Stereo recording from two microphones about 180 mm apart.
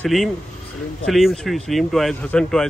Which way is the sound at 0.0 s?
Centre (ahead or behind).